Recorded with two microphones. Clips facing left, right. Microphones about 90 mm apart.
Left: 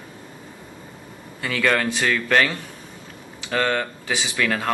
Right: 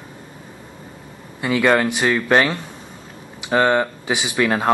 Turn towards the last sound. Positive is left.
turn(degrees=-25)  # may be behind; listen again after turning